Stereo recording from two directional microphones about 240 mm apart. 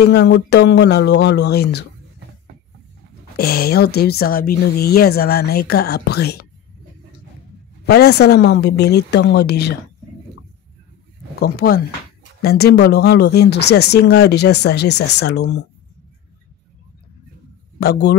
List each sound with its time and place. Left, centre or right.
0.1 s speech: left
3.3 s speech: left
7.8 s speech: left
11.3 s speech: left
17.7 s speech: left